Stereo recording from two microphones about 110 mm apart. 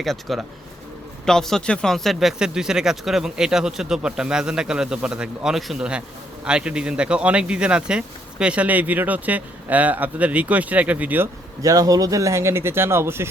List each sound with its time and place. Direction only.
0.0 s speech: centre (ahead or behind); by 11.3 s 15° right (ahead or behind)
11.6 s speech: 30° right (ahead or behind)